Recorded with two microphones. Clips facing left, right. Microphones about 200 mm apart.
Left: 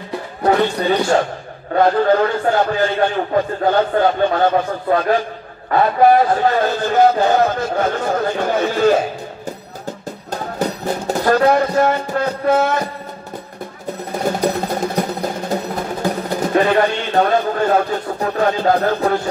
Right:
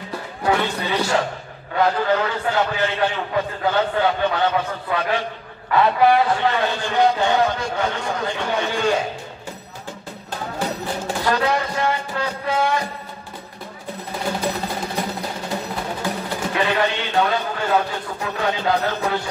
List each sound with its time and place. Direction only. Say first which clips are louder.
0.4 s a man's voice: left 6 dB; 40° left (ahead or behind)
11.1 s a man's voice: left 7 dB; 45° left (ahead or behind)
14.2 s a sound: left 6 dB; 45° left (ahead or behind)
15.5 s speech: left 5 dB; 40° left (ahead or behind)